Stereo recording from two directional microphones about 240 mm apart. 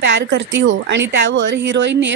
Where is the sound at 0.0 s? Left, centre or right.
Right.